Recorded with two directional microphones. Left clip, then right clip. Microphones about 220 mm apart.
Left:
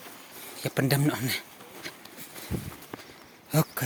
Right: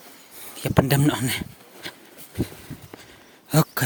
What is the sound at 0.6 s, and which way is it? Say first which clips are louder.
Speech: right 6 dB; 40° right (ahead or behind).